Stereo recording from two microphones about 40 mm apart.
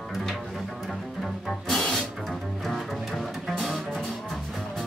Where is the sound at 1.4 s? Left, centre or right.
Centre.